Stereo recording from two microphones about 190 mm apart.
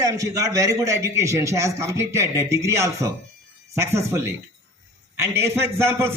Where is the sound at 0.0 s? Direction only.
15° right (ahead or behind).